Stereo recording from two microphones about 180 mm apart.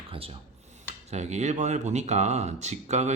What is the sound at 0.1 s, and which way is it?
Speech, 30° right (ahead or behind).